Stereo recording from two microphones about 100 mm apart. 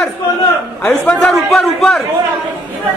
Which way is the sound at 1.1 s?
10° left (ahead or behind).